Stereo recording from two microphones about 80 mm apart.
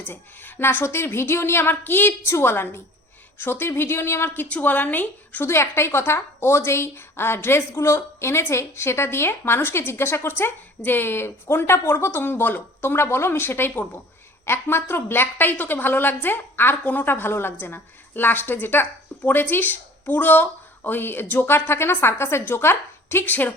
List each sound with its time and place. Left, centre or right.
0.1 s a woman's voice: left
4.4 s a woman's voice: centre